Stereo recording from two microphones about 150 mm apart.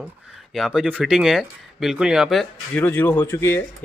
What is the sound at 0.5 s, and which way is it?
Speech, 5° right (ahead or behind).